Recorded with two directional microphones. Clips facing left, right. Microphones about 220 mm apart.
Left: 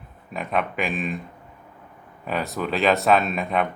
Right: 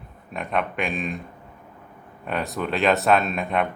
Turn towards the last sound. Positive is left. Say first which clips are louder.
# even
turn(degrees=0)  # may be behind; listen again after turning